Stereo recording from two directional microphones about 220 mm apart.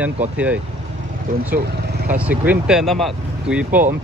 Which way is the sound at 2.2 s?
5° right (ahead or behind).